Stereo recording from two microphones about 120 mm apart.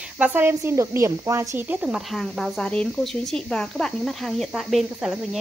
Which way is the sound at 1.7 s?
10° right (ahead or behind).